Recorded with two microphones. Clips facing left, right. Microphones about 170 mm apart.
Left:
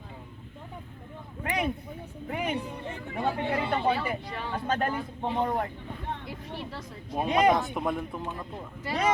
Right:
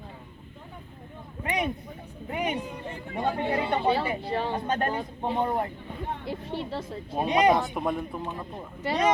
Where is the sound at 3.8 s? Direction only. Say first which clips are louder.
Right 2 dB; 30° right (ahead or behind).